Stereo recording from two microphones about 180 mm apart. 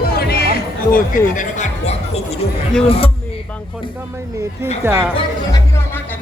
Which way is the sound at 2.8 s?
30° left (ahead or behind).